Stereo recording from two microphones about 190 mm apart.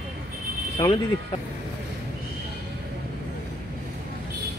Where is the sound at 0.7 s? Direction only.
25° left (ahead or behind).